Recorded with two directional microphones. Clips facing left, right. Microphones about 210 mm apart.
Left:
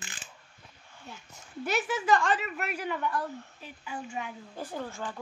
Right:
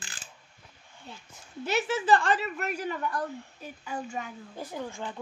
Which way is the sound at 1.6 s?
25° right (ahead or behind).